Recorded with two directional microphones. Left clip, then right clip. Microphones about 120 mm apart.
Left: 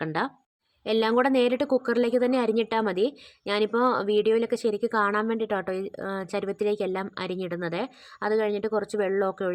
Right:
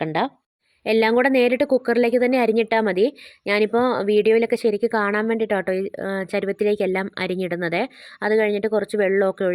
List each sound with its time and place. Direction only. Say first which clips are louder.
0.0 s a woman's voice: right 6 dB; 30° right (ahead or behind)